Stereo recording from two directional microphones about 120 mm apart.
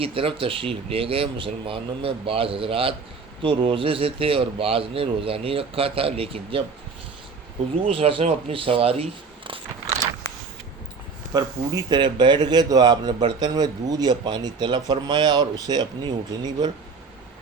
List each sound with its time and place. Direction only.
0.0 s a man's voice: 50° right (ahead or behind)
7.9 s a man's voice: 50° right (ahead or behind)
11.3 s a man's voice: 30° right (ahead or behind)